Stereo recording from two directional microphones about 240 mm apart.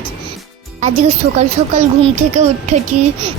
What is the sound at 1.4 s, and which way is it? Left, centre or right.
Speech, right.